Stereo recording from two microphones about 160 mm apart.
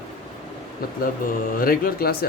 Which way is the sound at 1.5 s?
65° left (ahead or behind).